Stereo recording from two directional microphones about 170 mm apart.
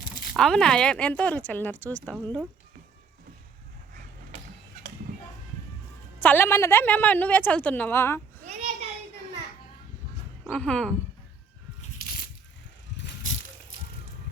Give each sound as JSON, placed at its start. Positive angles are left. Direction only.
{"t": 0.3, "sound": "speech", "side_deg": 5}
{"t": 6.2, "sound": "speech", "side_deg": 15}
{"t": 8.4, "sound": "a sound", "side_deg": -40}
{"t": 10.5, "sound": "speech", "side_deg": 5}